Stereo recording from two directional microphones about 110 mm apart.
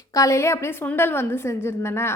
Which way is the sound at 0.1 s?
30° left (ahead or behind).